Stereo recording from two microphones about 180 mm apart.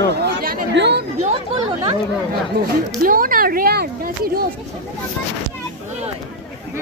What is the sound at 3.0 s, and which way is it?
Speech, 50° right (ahead or behind).